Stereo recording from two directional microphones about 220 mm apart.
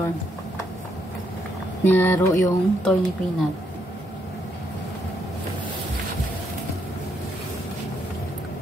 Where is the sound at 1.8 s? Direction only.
10° left (ahead or behind).